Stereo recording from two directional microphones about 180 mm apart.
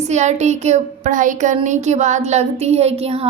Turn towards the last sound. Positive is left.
turn(degrees=-35)  # may be behind; listen again after turning